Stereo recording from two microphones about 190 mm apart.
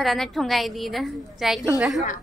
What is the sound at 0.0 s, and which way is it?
A woman's voice, centre (ahead or behind).